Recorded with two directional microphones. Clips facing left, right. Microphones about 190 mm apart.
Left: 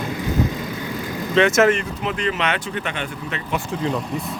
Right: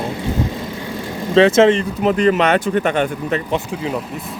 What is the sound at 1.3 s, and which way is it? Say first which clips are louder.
Speech: right 5 dB; 30° right (ahead or behind).